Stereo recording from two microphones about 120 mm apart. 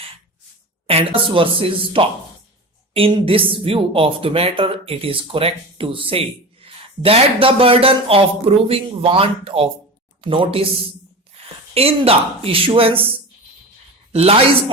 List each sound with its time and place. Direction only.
0.9 s speech: 50° right (ahead or behind)
11.7 s speech: 55° right (ahead or behind)
14.1 s speech: 55° right (ahead or behind)